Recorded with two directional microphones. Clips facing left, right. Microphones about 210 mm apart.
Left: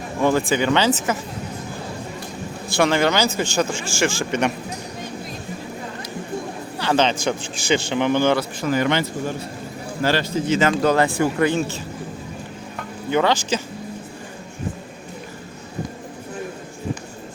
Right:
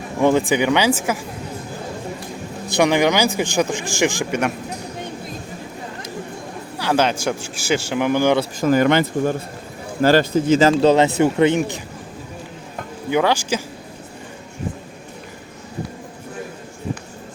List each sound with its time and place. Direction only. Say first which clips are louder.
0.2 s speech: right 3 dB; 15° right (ahead or behind)
2.6 s speech: right 2 dB; 15° right (ahead or behind)
6.7 s speech: right 1 dB; 10° right (ahead or behind)
8.6 s speech: right 6 dB; 45° right (ahead or behind)
10.7 s speech: right 4 dB; 30° right (ahead or behind)
13.1 s speech: right 1 dB; 10° right (ahead or behind)